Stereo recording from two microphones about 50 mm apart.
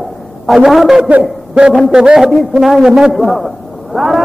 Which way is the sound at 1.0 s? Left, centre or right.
Right.